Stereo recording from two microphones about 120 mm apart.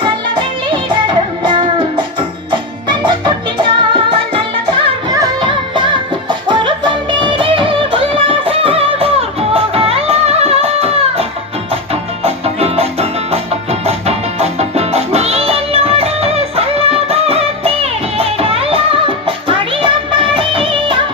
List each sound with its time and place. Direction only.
0.0 s music: 40° right (ahead or behind)
6.2 s music: 40° right (ahead or behind)